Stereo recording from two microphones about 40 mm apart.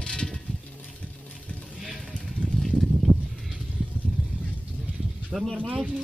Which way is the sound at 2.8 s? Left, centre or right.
Centre.